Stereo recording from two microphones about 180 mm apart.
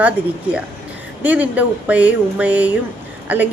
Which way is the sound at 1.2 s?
10° right (ahead or behind).